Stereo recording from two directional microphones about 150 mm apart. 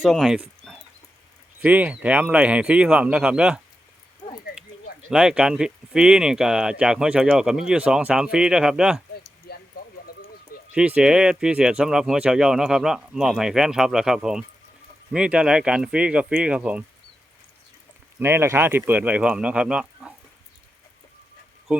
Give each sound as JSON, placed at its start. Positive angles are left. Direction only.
{"t": 0.0, "sound": "speech", "side_deg": 0}
{"t": 5.1, "sound": "speech", "side_deg": -5}
{"t": 9.5, "sound": "a sound", "side_deg": 90}
{"t": 10.8, "sound": "speech", "side_deg": -5}
{"t": 18.2, "sound": "speech", "side_deg": -15}
{"t": 21.7, "sound": "speech", "side_deg": -10}